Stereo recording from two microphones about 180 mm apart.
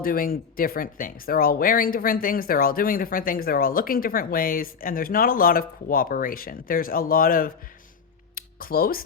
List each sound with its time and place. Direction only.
0.0 s speech: 55° left (ahead or behind)